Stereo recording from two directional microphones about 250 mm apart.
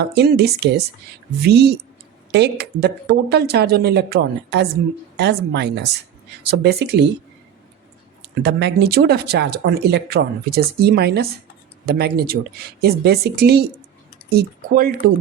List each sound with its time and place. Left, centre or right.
0.0 s speech: right
8.4 s speech: right